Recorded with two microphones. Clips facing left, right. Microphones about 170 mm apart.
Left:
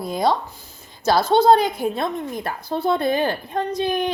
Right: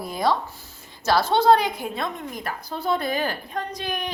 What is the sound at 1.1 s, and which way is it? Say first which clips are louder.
Speech: left 3 dB; 50° left (ahead or behind).